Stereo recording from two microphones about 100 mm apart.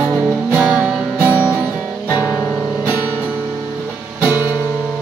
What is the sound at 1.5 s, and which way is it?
Guitar, 20° right (ahead or behind).